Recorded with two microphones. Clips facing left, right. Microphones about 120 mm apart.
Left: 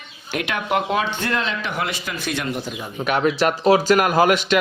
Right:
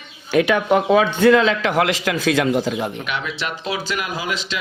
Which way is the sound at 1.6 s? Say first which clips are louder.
Right 8 dB; 90° right.